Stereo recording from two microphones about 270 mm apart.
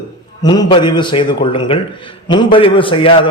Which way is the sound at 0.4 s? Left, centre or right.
Centre.